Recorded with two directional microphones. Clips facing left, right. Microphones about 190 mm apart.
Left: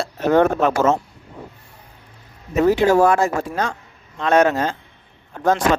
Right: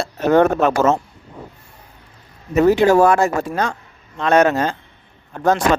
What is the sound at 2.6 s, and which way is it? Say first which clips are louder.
Speech: right 2 dB; 65° right (ahead or behind).